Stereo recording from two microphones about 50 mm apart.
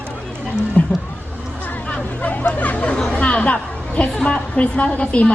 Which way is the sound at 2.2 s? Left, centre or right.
Left.